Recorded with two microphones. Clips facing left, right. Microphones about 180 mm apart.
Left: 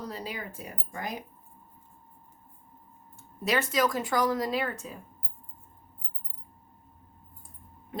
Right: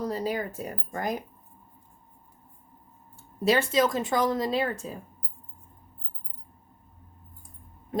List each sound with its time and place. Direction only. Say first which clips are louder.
0.1 s speech: right 8 dB; 45° right (ahead or behind)
3.4 s speech: right 4 dB; 30° right (ahead or behind)